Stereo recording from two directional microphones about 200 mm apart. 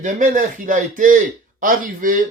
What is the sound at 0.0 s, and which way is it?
A man's voice, 40° right (ahead or behind).